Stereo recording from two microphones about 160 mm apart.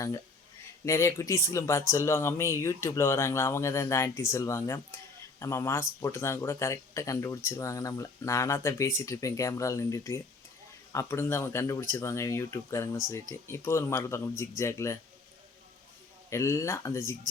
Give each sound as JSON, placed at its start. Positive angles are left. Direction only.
{"t": 0.9, "sound": "speech", "side_deg": 20}
{"t": 16.3, "sound": "speech", "side_deg": 20}